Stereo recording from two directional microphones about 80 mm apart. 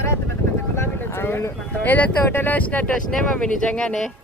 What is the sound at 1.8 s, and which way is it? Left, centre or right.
Speech, left.